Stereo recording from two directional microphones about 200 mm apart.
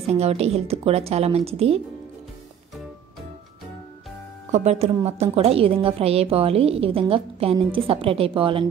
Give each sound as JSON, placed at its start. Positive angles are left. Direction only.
{"t": 0.0, "sound": "a woman's voice", "side_deg": -30}
{"t": 4.5, "sound": "a woman's voice", "side_deg": -35}